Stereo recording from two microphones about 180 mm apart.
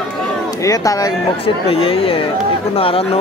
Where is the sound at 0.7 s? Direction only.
20° left (ahead or behind).